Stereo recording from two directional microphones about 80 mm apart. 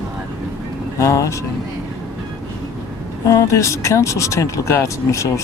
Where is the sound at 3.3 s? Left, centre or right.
Left.